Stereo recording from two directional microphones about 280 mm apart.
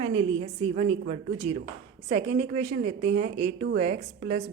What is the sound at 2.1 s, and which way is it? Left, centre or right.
A woman's voice, right.